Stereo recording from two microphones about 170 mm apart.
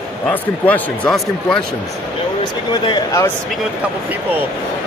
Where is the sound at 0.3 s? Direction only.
5° left (ahead or behind).